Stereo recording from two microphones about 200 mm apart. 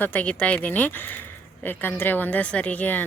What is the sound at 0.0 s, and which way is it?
Speech, 10° left (ahead or behind).